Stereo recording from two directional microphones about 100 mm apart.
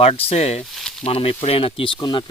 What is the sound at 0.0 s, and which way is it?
Speech, 75° left (ahead or behind).